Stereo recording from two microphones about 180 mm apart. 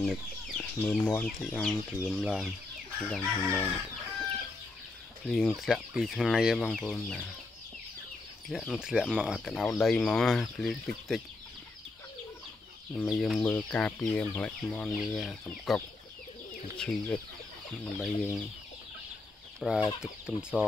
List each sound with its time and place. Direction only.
0.0 s speech: 5° left (ahead or behind)
5.2 s speech: centre (ahead or behind)
8.5 s speech: centre (ahead or behind)
12.9 s speech: centre (ahead or behind)
19.6 s speech: centre (ahead or behind)